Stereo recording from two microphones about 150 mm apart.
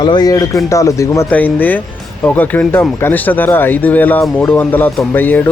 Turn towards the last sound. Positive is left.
turn(degrees=10)  # may be behind; listen again after turning